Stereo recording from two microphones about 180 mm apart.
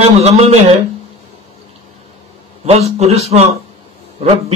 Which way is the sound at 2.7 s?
35° right (ahead or behind).